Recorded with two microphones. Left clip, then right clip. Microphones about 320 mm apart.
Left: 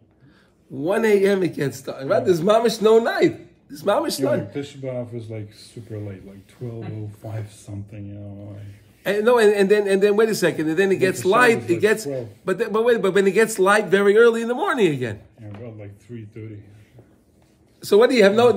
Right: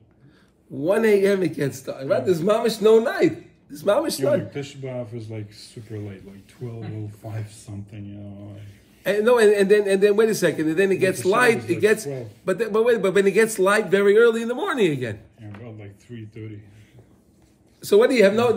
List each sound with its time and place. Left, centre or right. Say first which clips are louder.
0.7 s a man's voice: even; centre
9.0 s a man's voice: left 1 dB; centre
15.8 s a sound: left 2 dB; centre
17.7 s a man's voice: left 1 dB; centre